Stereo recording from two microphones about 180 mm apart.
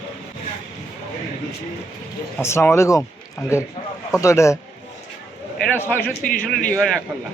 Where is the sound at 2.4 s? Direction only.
15° left (ahead or behind).